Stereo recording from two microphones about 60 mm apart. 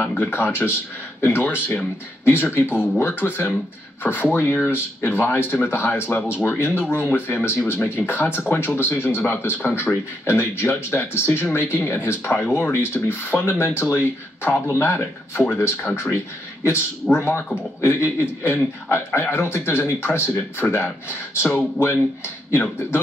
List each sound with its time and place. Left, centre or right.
0.0 s speech: left
12.3 s speech: left
17.2 s speech: left
20.2 s speech: left